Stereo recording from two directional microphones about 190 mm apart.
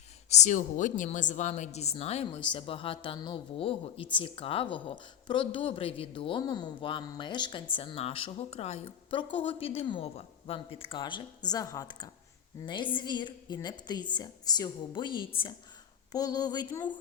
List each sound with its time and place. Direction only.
0.3 s a woman's voice: 40° left (ahead or behind); by 17.0 s 25° left (ahead or behind)